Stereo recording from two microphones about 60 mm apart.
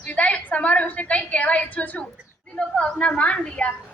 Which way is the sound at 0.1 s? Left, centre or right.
Left.